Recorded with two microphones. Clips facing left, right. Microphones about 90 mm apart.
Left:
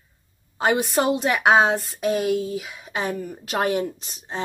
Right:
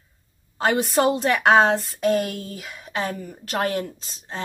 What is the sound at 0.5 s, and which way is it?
Speech, 10° left (ahead or behind).